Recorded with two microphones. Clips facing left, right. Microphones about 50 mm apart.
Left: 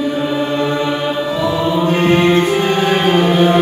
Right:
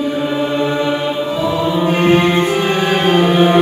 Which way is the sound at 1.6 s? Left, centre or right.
Centre.